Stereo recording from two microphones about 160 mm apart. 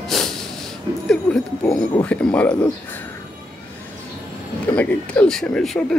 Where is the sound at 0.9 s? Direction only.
20° right (ahead or behind).